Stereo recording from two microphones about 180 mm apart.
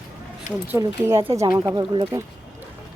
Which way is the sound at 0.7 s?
15° right (ahead or behind).